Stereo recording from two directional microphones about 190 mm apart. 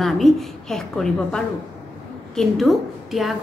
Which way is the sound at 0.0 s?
Centre (ahead or behind).